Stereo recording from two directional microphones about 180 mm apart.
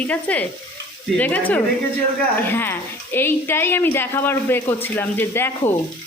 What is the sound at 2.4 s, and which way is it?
Speech, 10° left (ahead or behind).